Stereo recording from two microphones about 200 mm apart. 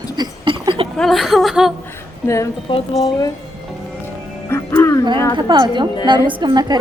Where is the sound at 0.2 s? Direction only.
20° right (ahead or behind).